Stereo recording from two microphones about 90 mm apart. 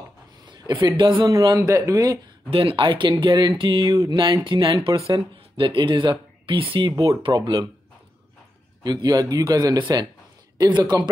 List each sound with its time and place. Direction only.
0.5 s a man's voice: 55° right (ahead or behind)
1.6 s speech: 35° right (ahead or behind)
2.5 s speech: 85° right; by 4.7 s 70° right (ahead or behind)
4.9 s speech: 35° right (ahead or behind)
5.6 s speech: 75° right (ahead or behind)
6.9 s speech: 40° right (ahead or behind)
7.2 s speech: 65° right (ahead or behind)
8.8 s a man's voice: 50° right (ahead or behind)
9.8 s a man's voice: 55° right (ahead or behind)